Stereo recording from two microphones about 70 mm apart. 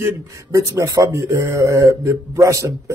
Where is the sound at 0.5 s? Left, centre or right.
Right.